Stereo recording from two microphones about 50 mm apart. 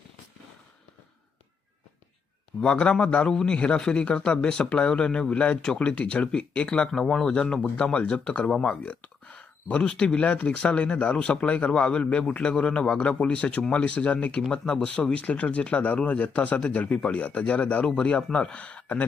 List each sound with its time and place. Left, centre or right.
2.6 s speech: left
8.8 s speech: left